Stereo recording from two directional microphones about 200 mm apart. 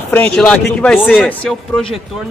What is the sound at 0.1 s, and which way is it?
A man's voice, 5° left (ahead or behind).